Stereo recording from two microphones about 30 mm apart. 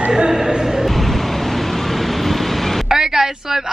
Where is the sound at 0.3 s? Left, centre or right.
Centre.